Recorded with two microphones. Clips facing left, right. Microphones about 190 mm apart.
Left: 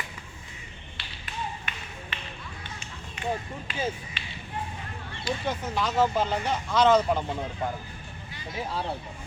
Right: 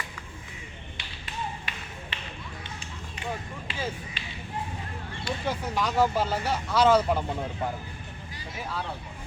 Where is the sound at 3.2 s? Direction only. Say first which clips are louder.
Left 4 dB; 35° right (ahead or behind).